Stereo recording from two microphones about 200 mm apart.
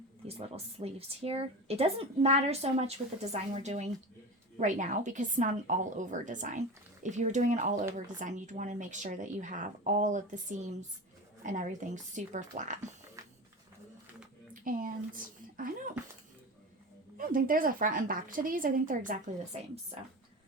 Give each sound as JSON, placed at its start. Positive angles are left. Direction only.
{"t": 0.3, "sound": "speech", "side_deg": -30}
{"t": 14.6, "sound": "speech", "side_deg": -45}
{"t": 17.2, "sound": "a woman's voice", "side_deg": -45}
{"t": 19.5, "sound": "speech", "side_deg": -30}